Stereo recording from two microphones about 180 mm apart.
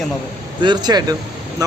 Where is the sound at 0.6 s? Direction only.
25° right (ahead or behind).